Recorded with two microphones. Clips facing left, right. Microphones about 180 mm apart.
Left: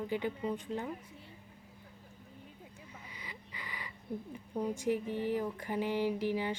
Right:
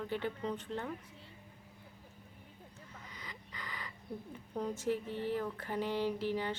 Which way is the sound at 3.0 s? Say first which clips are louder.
Left 1 dB; 10° left (ahead or behind).